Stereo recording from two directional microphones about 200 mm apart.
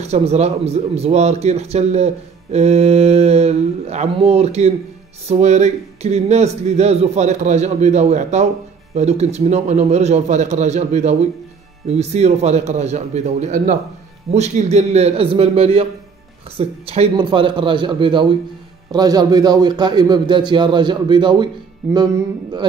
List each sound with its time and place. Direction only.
0.0 s a man's voice: 30° right (ahead or behind)